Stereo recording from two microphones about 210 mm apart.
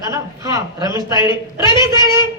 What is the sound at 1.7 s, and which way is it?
Speech, 20° left (ahead or behind).